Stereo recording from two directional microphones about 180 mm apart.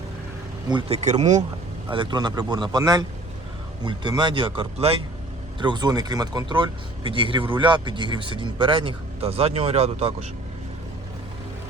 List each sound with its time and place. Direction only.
0.7 s speech: 30° right (ahead or behind)
1.9 s speech: 25° right (ahead or behind)